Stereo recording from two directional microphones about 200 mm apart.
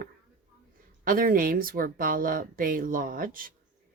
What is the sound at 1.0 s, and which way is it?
Speech, 45° right (ahead or behind).